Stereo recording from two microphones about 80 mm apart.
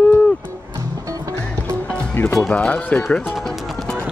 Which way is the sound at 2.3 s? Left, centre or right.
Centre.